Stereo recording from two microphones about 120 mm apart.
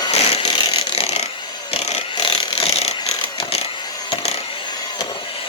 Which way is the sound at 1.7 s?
55° left (ahead or behind).